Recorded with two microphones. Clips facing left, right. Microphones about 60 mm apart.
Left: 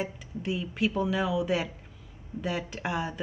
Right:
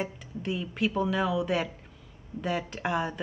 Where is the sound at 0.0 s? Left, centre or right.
Centre.